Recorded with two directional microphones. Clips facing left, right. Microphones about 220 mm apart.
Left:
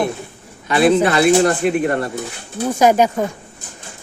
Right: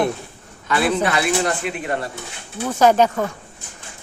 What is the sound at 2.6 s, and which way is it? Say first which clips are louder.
Speech: left 2 dB; 10° left (ahead or behind).